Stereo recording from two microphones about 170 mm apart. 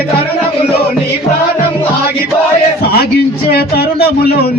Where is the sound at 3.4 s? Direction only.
65° left (ahead or behind).